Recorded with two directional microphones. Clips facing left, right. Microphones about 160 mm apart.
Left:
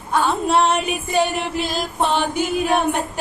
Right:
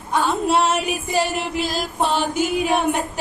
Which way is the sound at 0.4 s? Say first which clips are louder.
Left 1 dB; 5° right (ahead or behind).